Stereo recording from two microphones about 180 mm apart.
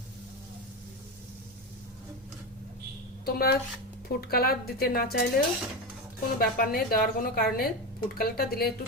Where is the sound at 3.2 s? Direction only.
60° left (ahead or behind).